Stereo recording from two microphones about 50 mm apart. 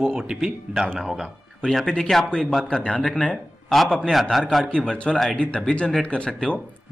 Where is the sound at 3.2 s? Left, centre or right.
Centre.